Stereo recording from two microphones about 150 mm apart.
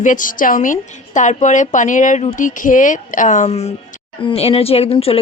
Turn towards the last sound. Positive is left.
turn(degrees=40)  # may be behind; listen again after turning